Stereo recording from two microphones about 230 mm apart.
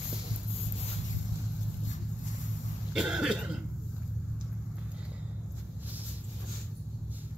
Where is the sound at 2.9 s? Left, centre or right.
Centre.